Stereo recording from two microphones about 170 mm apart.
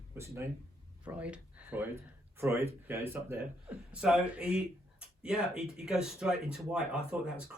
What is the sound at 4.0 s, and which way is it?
Speech, 5° right (ahead or behind).